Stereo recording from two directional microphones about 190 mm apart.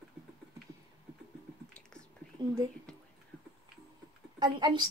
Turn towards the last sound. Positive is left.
turn(degrees=-20)  # may be behind; listen again after turning